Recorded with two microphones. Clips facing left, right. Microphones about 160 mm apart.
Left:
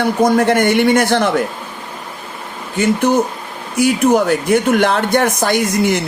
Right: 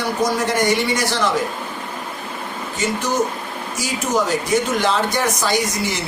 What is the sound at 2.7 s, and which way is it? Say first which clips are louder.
Speech: left 7 dB; 60° left (ahead or behind).